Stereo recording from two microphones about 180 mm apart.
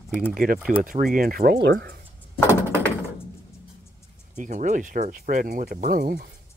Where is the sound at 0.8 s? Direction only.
50° right (ahead or behind); by 1.9 s 65° right (ahead or behind).